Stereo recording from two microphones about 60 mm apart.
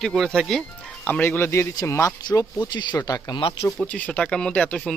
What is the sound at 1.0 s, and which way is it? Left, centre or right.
Speech, left.